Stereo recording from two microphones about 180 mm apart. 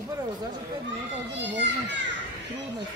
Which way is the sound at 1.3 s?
80° right.